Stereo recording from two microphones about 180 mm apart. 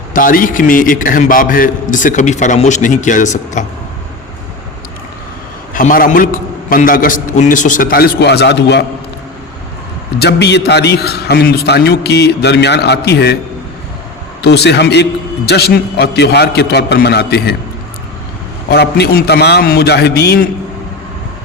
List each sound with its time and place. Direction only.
0.1 s a man's voice: 50° left (ahead or behind)
5.7 s a man's voice: 50° left (ahead or behind); by 8.8 s 70° left (ahead or behind)
10.2 s a man's voice: 70° left (ahead or behind)
14.4 s a man's voice: 70° left (ahead or behind)
18.7 s a man's voice: 65° left (ahead or behind)